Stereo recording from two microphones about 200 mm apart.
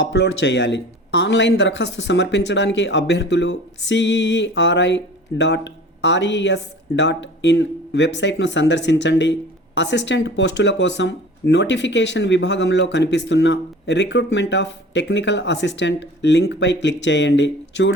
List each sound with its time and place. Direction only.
0.0 s speech: 60° left (ahead or behind)